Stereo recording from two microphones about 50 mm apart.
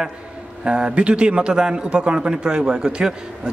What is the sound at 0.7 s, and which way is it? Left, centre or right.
A man's voice, right.